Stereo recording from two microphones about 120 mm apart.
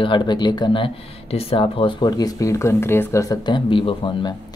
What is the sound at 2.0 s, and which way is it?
Speech, 30° left (ahead or behind).